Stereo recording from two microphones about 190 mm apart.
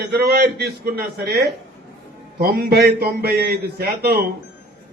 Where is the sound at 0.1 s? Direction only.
55° right (ahead or behind).